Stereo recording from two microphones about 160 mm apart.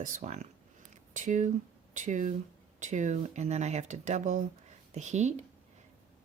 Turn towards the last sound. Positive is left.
turn(degrees=-45)  # may be behind; listen again after turning